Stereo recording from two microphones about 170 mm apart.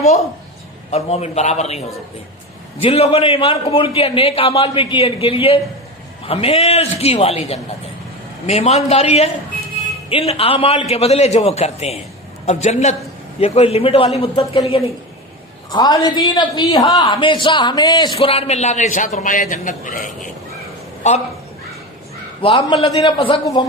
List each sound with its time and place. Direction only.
0.0 s a man's voice: 40° left (ahead or behind)
10.1 s a man's voice: 35° left (ahead or behind)
15.7 s a man's voice: 25° left (ahead or behind)
18.2 s a man's voice: 35° left (ahead or behind)
22.4 s a man's voice: 30° left (ahead or behind)